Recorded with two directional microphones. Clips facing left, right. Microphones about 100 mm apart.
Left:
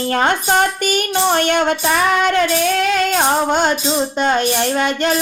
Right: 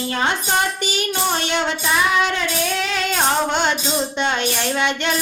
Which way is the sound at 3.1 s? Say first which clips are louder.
Left 4 dB; 40° left (ahead or behind).